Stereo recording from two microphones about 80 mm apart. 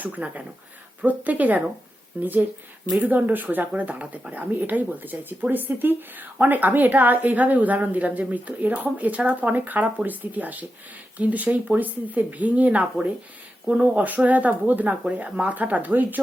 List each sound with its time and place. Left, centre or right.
0.0 s speech: centre